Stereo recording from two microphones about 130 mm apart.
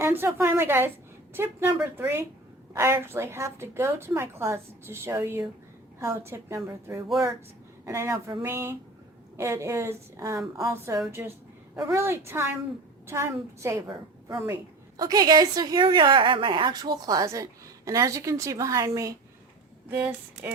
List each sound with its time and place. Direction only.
0.0 s a woman's voice: 20° right (ahead or behind)
19.9 s speech: 10° right (ahead or behind)